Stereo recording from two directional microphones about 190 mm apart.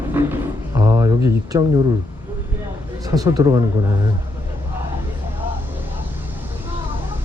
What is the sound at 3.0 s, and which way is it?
Speech, 20° right (ahead or behind).